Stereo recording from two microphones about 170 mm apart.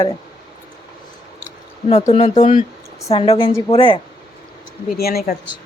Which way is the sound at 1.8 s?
40° left (ahead or behind).